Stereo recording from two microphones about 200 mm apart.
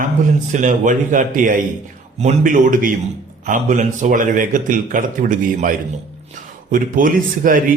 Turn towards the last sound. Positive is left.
turn(degrees=-45)  # may be behind; listen again after turning